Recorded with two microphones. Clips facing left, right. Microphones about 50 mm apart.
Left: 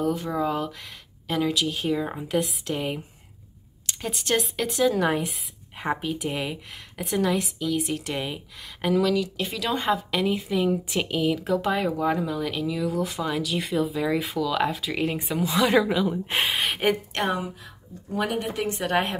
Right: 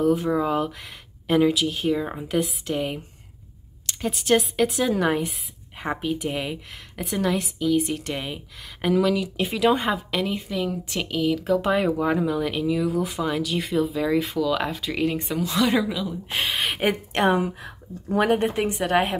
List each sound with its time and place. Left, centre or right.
0.0 s speech: centre
1.6 s speech: centre
4.0 s speech: centre
9.8 s a woman's voice: centre
11.5 s speech: centre
16.4 s speech: centre
17.1 s a woman's voice: right
17.4 s speech: right
18.8 s speech: centre